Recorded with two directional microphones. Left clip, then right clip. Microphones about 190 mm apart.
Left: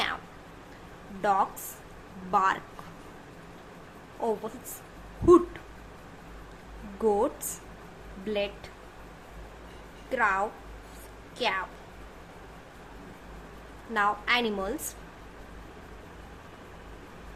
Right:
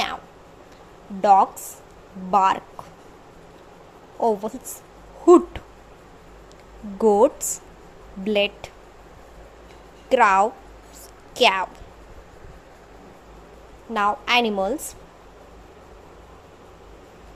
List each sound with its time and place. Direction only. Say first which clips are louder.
1.2 s a woman's voice: right 10 dB; 30° right (ahead or behind)
4.2 s a woman's voice: right 9 dB; 25° right (ahead or behind)
7.0 s speech: right 9 dB; 35° right (ahead or behind)
10.1 s speech: right 10 dB; 40° right (ahead or behind)
13.9 s a woman's voice: right 6 dB; 30° right (ahead or behind)